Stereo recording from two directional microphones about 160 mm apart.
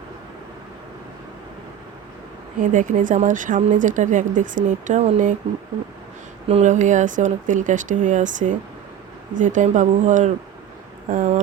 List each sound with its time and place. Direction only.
2.6 s speech: 55° right (ahead or behind)
6.5 s speech: 45° right (ahead or behind)